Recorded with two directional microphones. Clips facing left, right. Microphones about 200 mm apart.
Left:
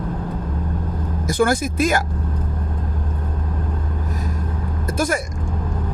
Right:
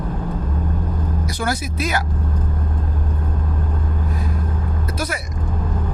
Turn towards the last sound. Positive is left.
turn(degrees=45)  # may be behind; listen again after turning